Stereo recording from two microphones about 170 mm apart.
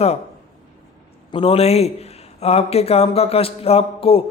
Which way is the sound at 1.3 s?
35° left (ahead or behind).